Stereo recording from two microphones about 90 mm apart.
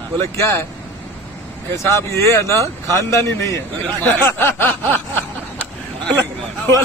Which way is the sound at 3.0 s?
30° left (ahead or behind).